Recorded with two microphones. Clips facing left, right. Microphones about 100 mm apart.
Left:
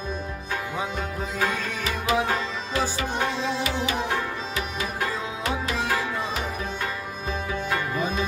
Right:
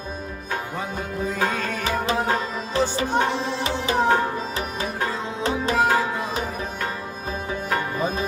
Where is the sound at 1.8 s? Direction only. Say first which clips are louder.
Even; 35° right (ahead or behind).